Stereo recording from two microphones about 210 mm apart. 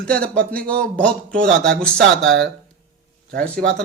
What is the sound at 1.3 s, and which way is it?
Speech, 40° right (ahead or behind).